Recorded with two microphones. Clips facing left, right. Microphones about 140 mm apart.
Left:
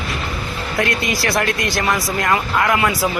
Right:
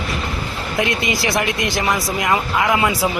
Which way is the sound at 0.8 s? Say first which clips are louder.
Even; 20° right (ahead or behind).